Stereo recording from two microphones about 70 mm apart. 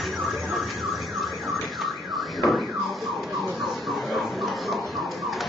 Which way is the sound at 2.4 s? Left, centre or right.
Centre.